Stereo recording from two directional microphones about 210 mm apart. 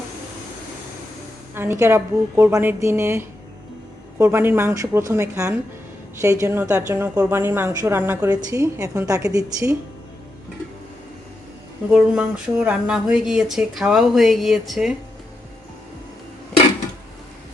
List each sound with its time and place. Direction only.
1.5 s a woman's voice: 10° right (ahead or behind)
11.9 s a woman's voice: 5° right (ahead or behind)